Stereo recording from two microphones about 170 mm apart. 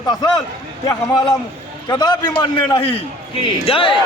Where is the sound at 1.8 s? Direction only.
25° left (ahead or behind).